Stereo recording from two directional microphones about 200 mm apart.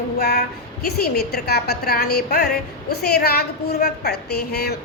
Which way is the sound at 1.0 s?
50° left (ahead or behind).